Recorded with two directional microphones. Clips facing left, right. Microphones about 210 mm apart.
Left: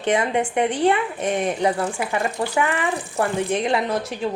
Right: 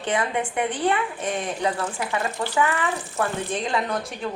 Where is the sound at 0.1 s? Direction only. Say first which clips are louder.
Left 5 dB; 25° left (ahead or behind).